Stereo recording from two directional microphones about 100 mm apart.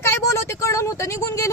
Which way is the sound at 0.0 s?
25° left (ahead or behind).